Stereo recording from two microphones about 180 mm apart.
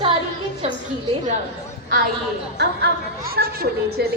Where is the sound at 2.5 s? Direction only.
60° right (ahead or behind).